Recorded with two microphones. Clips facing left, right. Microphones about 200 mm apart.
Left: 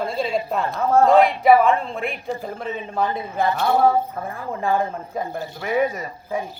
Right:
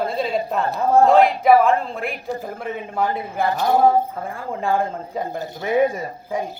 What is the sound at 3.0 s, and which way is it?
A woman's voice, 15° right (ahead or behind).